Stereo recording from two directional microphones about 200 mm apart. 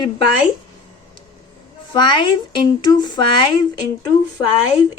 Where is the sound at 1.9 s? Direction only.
25° left (ahead or behind).